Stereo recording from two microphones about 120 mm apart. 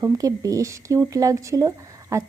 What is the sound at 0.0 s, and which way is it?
A woman's voice, 30° right (ahead or behind).